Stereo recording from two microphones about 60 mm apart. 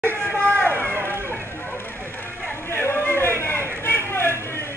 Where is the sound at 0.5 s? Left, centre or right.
Left.